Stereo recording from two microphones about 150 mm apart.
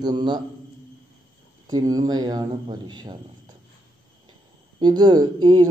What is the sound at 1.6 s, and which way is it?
Speech, 25° right (ahead or behind).